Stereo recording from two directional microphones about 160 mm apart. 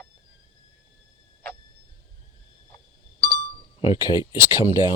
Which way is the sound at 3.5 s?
35° left (ahead or behind).